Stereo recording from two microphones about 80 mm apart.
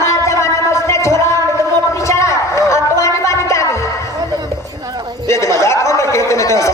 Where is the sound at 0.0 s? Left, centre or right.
Left.